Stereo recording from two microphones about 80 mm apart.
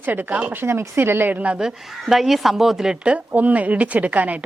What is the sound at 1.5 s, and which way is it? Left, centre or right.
A woman's voice, centre.